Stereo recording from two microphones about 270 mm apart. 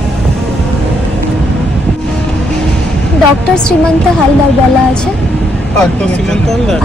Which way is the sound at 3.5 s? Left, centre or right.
Centre.